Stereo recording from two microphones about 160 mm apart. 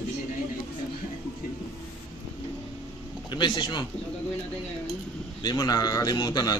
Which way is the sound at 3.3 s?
30° left (ahead or behind).